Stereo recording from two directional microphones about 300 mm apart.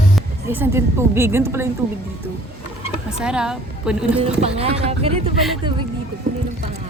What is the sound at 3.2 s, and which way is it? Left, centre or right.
Speech, centre.